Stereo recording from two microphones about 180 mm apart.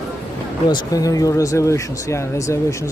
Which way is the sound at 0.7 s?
20° left (ahead or behind).